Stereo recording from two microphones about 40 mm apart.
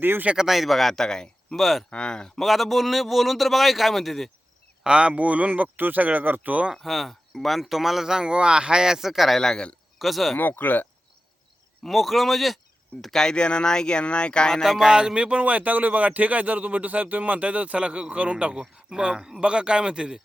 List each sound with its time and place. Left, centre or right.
0.3 s a man's voice: centre
1.5 s a man's voice: centre
1.9 s speech: left
2.4 s a man's voice: centre
4.8 s speech: right
6.8 s speech: centre
9.4 s speech: centre
10.0 s a man's voice: centre
10.3 s speech: left
11.9 s a man's voice: centre
13.0 s speech: centre
13.3 s speech: left
14.5 s a man's voice: centre
14.8 s speech: centre